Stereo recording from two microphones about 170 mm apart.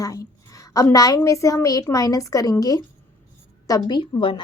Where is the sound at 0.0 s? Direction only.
20° left (ahead or behind).